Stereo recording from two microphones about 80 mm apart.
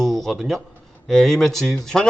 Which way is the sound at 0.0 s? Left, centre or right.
Centre.